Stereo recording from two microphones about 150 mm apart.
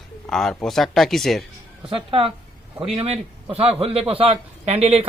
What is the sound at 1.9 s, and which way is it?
A man's voice, 35° right (ahead or behind).